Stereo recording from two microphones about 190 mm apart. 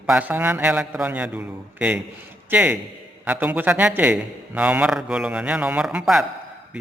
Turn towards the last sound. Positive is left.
turn(degrees=0)  # may be behind; listen again after turning